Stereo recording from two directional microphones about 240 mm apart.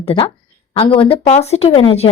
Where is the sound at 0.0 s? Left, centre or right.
Left.